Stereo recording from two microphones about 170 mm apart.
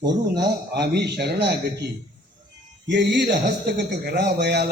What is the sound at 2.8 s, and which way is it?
Speech, 90° right.